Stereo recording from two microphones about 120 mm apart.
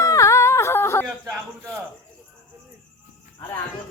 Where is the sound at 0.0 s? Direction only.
25° left (ahead or behind).